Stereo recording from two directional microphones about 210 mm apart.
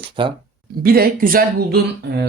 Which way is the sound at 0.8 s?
45° right (ahead or behind).